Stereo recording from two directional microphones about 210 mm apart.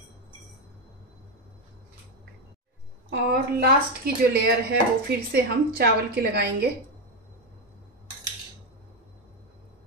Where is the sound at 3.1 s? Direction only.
45° right (ahead or behind).